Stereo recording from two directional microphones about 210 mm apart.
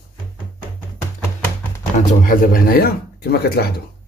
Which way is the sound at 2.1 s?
40° left (ahead or behind).